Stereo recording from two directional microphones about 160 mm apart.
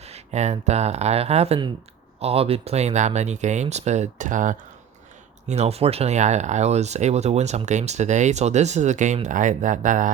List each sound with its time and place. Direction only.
0.0 s speech: 40° right (ahead or behind)
5.5 s speech: 40° right (ahead or behind)